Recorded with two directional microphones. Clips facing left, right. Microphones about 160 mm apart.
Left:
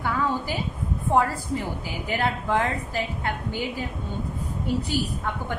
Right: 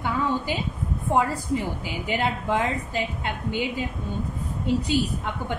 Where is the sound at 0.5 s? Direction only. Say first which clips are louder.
Right 1 dB; 20° right (ahead or behind).